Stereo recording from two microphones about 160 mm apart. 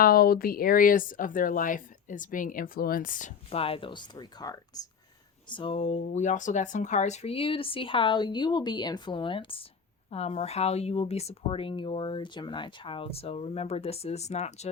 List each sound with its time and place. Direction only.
0.0 s speech: 70° left (ahead or behind)
3.5 s speech: 35° left (ahead or behind)
6.0 s speech: 50° left (ahead or behind)